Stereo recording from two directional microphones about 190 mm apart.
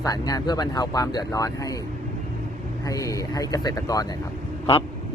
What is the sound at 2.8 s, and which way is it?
Speech, 15° left (ahead or behind).